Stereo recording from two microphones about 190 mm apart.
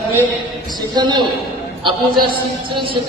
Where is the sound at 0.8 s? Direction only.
25° right (ahead or behind).